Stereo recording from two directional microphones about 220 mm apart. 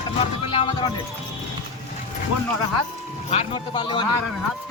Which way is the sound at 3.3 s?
20° left (ahead or behind).